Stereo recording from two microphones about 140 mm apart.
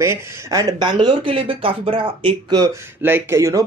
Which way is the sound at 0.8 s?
35° right (ahead or behind).